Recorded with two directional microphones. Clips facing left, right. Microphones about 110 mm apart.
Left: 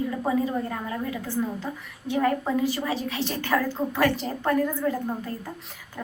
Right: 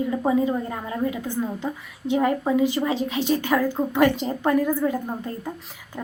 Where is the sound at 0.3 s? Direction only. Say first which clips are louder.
Right 3 dB; 20° right (ahead or behind).